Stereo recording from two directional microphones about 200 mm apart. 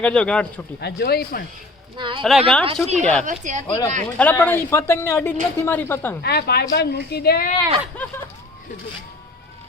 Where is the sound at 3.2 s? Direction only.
40° right (ahead or behind).